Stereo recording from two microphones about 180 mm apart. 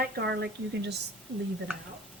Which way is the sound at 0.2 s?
65° right (ahead or behind).